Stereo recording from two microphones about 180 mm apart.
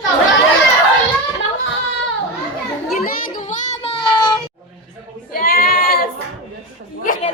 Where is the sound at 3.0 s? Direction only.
45° left (ahead or behind); by 4.4 s 25° left (ahead or behind).